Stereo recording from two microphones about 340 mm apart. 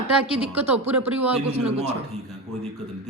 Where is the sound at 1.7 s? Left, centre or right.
Centre.